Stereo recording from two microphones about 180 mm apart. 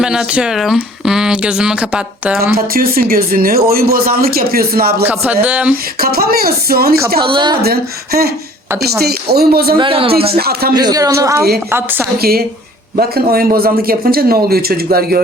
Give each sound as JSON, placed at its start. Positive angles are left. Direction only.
{"t": 0.0, "sound": "speech", "side_deg": -5}
{"t": 2.6, "sound": "speech", "side_deg": -55}
{"t": 5.0, "sound": "speech", "side_deg": -10}
{"t": 5.7, "sound": "speech", "side_deg": -55}
{"t": 7.2, "sound": "a man's voice", "side_deg": -25}
{"t": 7.5, "sound": "speech", "side_deg": -60}
{"t": 9.7, "sound": "a man's voice", "side_deg": -30}
{"t": 10.3, "sound": "speech", "side_deg": -60}
{"t": 10.8, "sound": "a man's voice", "side_deg": -20}
{"t": 13.0, "sound": "speech", "side_deg": -55}